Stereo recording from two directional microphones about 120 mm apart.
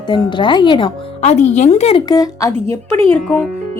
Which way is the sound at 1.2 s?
70° left (ahead or behind).